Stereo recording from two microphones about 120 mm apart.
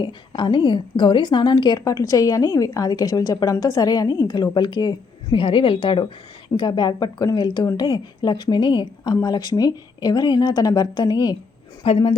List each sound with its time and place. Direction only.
0.0 s a woman's voice: 40° left (ahead or behind)
11.8 s a woman's voice: 50° left (ahead or behind)